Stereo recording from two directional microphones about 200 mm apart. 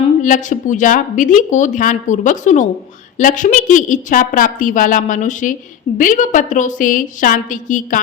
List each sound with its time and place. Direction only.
0.2 s speech: 40° left (ahead or behind)